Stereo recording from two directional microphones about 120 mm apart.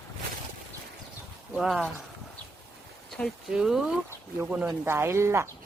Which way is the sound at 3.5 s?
5° right (ahead or behind).